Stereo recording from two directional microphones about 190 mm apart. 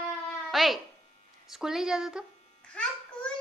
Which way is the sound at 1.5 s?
Centre (ahead or behind).